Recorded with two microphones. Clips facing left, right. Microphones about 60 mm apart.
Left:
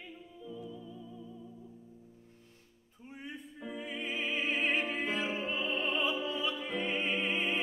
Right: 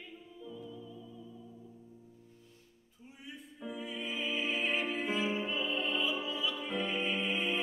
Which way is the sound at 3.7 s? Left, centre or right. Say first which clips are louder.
Left 2 dB; left.